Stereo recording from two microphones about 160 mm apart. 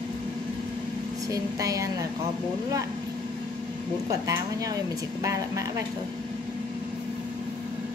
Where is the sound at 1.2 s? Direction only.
20° right (ahead or behind).